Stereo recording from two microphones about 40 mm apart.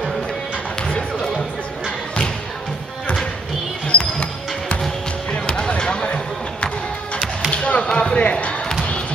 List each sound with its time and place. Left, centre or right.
0.8 s a sound: left
3.9 s basketball bounce: left
5.3 s music: left
7.5 s basketball bounce: left
8.2 s music: left